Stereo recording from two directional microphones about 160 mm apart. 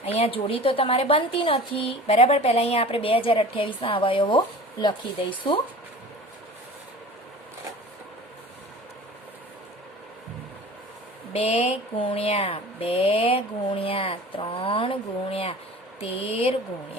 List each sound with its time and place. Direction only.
0.0 s a woman's voice: 40° left (ahead or behind)
11.3 s a woman's voice: 40° left (ahead or behind)